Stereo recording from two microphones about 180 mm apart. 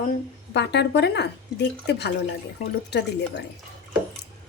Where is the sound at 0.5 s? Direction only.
70° left (ahead or behind).